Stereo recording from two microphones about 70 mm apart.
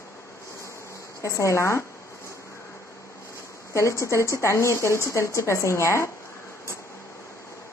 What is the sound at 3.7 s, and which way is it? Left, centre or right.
Speech, left.